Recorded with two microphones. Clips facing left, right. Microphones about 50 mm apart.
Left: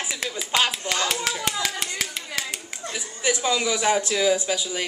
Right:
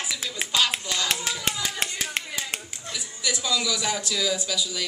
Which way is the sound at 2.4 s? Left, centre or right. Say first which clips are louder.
Left 4 dB; left.